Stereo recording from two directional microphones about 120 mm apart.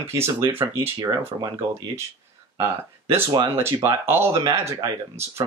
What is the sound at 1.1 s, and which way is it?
Speech, 30° right (ahead or behind).